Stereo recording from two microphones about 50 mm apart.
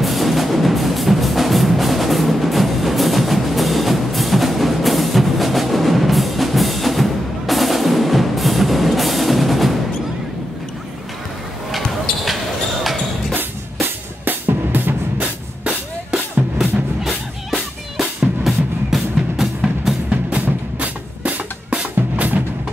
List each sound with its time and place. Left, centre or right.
0.0 s music: centre
11.7 s basketball bounce: centre
13.7 s music: right
16.5 s music: centre
20.2 s music: right